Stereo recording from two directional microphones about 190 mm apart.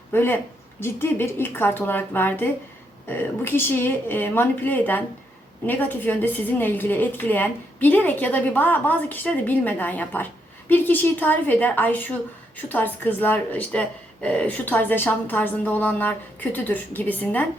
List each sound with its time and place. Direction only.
0.1 s a woman's voice: 10° left (ahead or behind)